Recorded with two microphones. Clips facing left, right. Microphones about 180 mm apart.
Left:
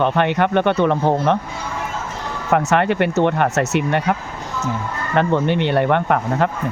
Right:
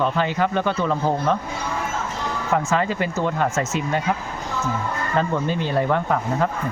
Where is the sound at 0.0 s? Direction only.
65° left (ahead or behind).